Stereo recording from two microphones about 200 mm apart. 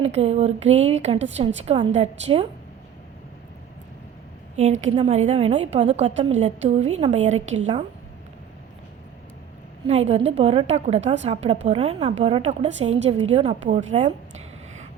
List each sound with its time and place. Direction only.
0.0 s a woman's voice: 30° right (ahead or behind)
4.5 s a woman's voice: 35° right (ahead or behind)
9.8 s a woman's voice: 30° right (ahead or behind)